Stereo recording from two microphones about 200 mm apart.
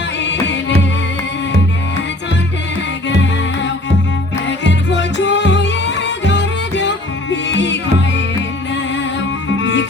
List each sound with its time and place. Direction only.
0.2 s music: 65° left (ahead or behind)
4.4 s music: 65° left (ahead or behind)
9.6 s music: 65° left (ahead or behind)